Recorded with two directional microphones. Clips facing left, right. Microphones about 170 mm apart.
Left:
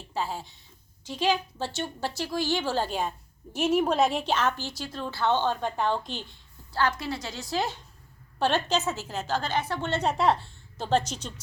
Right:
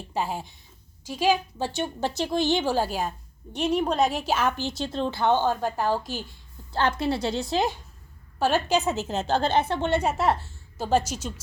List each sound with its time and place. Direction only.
0.1 s a woman's voice: 15° right (ahead or behind)
3.5 s a woman's voice: 5° left (ahead or behind)
6.7 s a woman's voice: 25° right (ahead or behind)
8.4 s a woman's voice: 10° right (ahead or behind)